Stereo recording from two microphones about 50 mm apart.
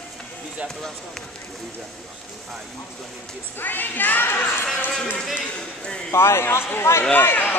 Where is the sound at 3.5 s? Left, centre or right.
Left.